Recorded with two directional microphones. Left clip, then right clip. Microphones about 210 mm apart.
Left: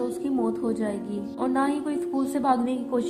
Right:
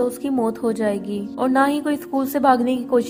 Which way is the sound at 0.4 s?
45° right (ahead or behind).